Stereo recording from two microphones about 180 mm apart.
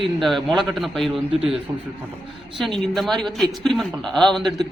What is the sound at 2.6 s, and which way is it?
A woman's voice, centre (ahead or behind).